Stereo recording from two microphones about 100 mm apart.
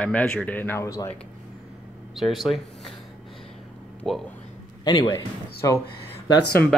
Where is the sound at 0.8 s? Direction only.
35° left (ahead or behind).